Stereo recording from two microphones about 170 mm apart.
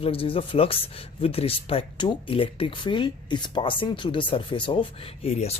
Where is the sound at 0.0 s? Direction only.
35° left (ahead or behind).